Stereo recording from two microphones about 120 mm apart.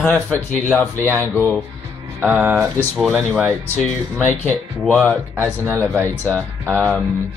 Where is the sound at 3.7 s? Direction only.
15° left (ahead or behind).